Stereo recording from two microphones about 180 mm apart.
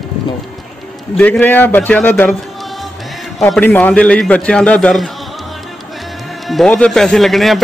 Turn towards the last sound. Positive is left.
turn(degrees=0)  # may be behind; listen again after turning